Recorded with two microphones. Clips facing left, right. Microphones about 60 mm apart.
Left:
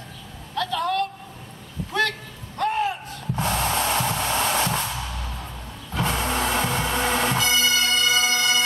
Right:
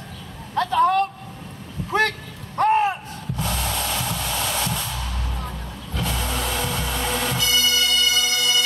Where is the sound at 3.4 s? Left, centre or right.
Left.